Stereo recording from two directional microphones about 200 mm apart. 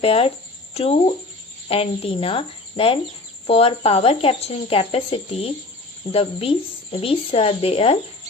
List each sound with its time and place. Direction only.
0.0 s speech: 30° left (ahead or behind)